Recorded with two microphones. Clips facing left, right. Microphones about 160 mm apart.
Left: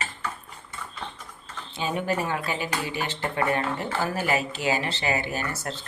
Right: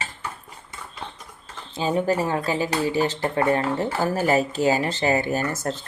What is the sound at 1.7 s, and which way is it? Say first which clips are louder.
Speech: right 5 dB; 35° right (ahead or behind).